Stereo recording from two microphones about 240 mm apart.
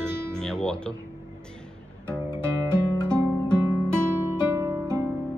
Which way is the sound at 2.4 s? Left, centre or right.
Centre.